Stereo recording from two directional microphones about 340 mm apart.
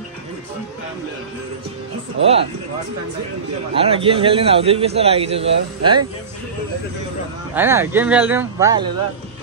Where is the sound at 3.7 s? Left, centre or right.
Centre.